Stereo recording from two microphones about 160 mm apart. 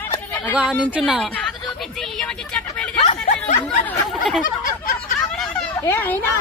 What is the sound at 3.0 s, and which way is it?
Snicker, 40° left (ahead or behind).